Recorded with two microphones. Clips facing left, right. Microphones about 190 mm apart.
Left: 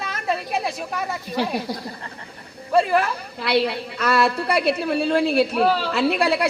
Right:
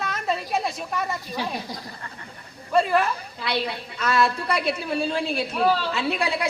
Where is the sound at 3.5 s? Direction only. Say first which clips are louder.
Left 7 dB; 65° left (ahead or behind).